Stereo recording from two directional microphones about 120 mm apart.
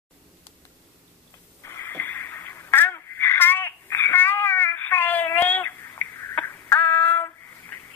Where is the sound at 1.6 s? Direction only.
20° left (ahead or behind).